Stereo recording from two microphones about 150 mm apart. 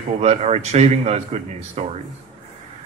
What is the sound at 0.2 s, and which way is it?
A woman's voice, 45° right (ahead or behind).